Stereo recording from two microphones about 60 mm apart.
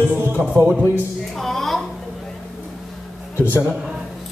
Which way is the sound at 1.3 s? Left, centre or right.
Centre.